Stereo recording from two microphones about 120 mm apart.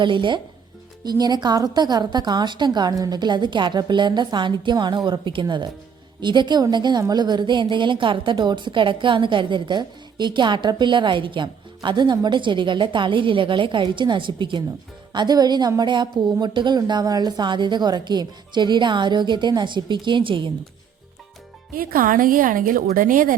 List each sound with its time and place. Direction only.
0.0 s a woman's voice: 40° right (ahead or behind)